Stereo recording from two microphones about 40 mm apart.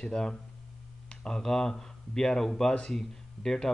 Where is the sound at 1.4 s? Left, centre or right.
Centre.